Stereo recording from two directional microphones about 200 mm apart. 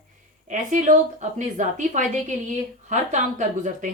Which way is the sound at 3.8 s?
40° right (ahead or behind).